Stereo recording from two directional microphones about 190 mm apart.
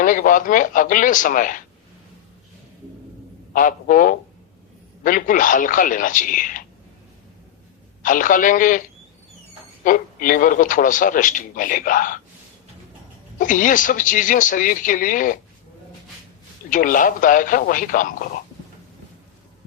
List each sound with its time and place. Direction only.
0.0 s a man's voice: 45° left (ahead or behind)
3.5 s a man's voice: 45° left (ahead or behind)
8.0 s a man's voice: 45° left (ahead or behind)
9.8 s a man's voice: 45° left (ahead or behind)
13.4 s a man's voice: 45° left (ahead or behind)
16.6 s a man's voice: 45° left (ahead or behind)